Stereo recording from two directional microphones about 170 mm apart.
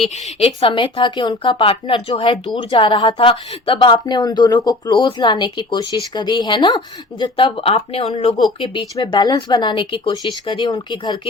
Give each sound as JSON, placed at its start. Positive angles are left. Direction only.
{"t": 0.0, "sound": "a woman's voice", "side_deg": 35}
{"t": 9.0, "sound": "a woman's voice", "side_deg": 25}